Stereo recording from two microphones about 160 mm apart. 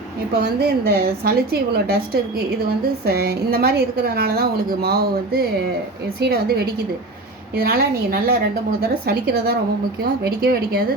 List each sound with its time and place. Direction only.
0.3 s a woman's voice: 80° right
3.1 s a woman's voice: 75° right (ahead or behind)